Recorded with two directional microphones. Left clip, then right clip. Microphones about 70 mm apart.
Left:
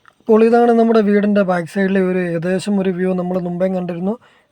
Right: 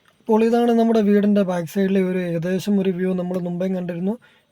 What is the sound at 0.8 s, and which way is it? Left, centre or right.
Speech, centre.